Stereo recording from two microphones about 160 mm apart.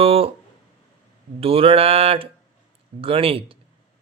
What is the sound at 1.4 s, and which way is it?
Speech, 35° right (ahead or behind).